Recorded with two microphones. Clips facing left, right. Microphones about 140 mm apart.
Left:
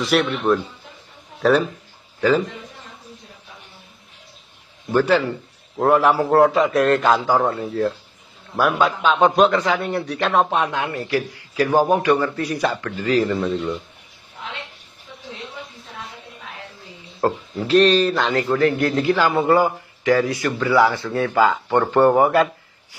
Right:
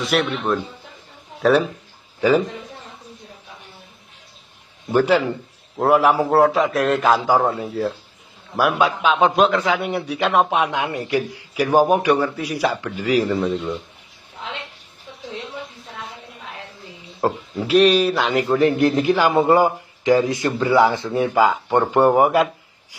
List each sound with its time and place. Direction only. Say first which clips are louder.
0.0 s a man's voice: left 2 dB; centre (ahead or behind)
2.1 s a man's voice: right 1 dB; 10° right (ahead or behind)
4.9 s a man's voice: right 1 dB; 10° right (ahead or behind)
17.2 s speech: even; 10° right (ahead or behind)